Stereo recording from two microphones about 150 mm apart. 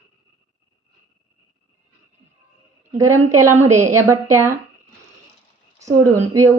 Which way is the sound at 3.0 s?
20° right (ahead or behind).